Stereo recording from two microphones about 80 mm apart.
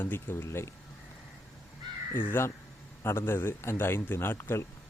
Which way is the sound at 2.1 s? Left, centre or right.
Left.